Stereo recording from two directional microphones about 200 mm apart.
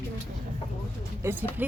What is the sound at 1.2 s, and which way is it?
Speech, 10° right (ahead or behind).